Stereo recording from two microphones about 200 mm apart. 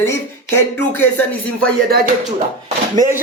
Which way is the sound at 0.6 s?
10° left (ahead or behind).